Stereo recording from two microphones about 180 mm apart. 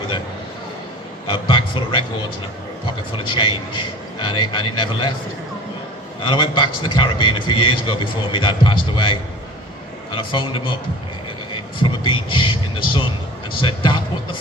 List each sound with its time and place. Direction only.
1.3 s a man's voice: 25° left (ahead or behind)
3.1 s a man's voice: 25° left (ahead or behind)
6.2 s a man's voice: 25° left (ahead or behind)
11.8 s a man's voice: 25° left (ahead or behind)